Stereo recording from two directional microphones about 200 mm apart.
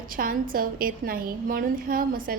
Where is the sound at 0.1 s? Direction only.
45° right (ahead or behind).